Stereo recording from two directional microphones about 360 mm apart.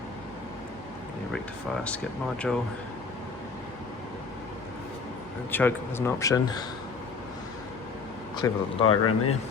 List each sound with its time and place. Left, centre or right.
2.5 s speech: centre
5.5 s speech: centre
8.4 s speech: centre
8.8 s speech: left